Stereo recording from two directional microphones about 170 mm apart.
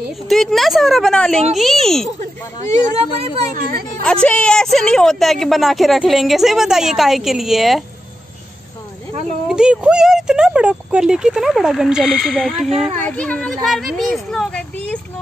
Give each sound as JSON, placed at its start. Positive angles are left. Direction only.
{"t": 0.3, "sound": "a woman's voice", "side_deg": 0}
{"t": 3.5, "sound": "a woman's voice", "side_deg": -55}
{"t": 4.0, "sound": "a woman's voice", "side_deg": 5}
{"t": 9.5, "sound": "a woman's voice", "side_deg": -5}
{"t": 12.9, "sound": "a woman's voice", "side_deg": 10}